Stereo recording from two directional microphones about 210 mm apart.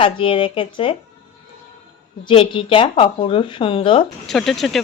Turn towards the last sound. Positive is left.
turn(degrees=0)  # may be behind; listen again after turning